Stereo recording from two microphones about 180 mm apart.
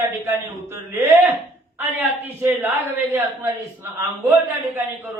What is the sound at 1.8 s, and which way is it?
Speech, 10° right (ahead or behind).